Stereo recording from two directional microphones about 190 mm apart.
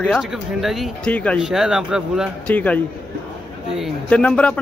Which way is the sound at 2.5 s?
10° left (ahead or behind).